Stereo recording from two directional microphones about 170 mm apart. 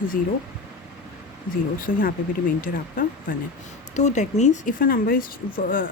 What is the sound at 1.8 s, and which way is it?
Speech, 55° left (ahead or behind).